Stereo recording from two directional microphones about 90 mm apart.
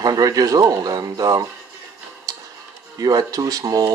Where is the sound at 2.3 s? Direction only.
45° right (ahead or behind).